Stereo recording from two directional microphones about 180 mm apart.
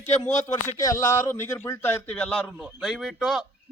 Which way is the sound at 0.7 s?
20° left (ahead or behind).